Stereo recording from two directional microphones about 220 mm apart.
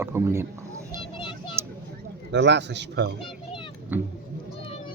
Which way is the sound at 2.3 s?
50° right (ahead or behind).